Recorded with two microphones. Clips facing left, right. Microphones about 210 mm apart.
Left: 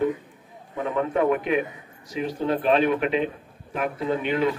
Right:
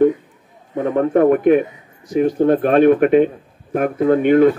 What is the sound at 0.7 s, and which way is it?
A man's voice, 50° right (ahead or behind).